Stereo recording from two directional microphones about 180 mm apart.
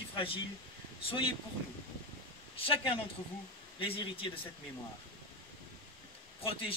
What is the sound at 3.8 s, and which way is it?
Speech, 30° left (ahead or behind).